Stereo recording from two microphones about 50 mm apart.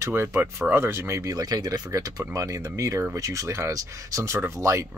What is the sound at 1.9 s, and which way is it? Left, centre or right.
Speech, right.